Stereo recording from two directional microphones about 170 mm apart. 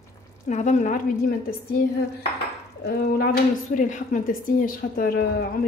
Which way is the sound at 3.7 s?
50° left (ahead or behind).